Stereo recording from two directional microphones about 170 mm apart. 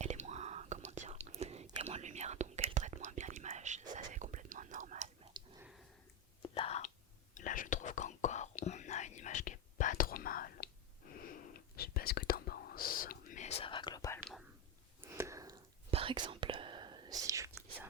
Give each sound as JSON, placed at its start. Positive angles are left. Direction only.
{"t": 0.0, "sound": "whispering", "side_deg": -40}
{"t": 6.4, "sound": "whispering", "side_deg": 35}
{"t": 7.3, "sound": "whispering", "side_deg": 50}
{"t": 11.8, "sound": "whispering", "side_deg": 65}
{"t": 15.0, "sound": "a sound", "side_deg": -15}
{"t": 15.9, "sound": "whispering", "side_deg": -30}